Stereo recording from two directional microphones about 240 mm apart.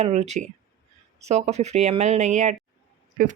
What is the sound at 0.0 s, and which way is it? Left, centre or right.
A woman's voice, right.